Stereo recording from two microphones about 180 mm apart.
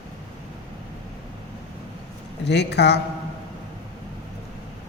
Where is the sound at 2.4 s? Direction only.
70° left (ahead or behind).